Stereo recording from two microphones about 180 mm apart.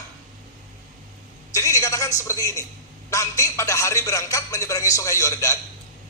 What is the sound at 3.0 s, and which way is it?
A man's voice, 15° left (ahead or behind).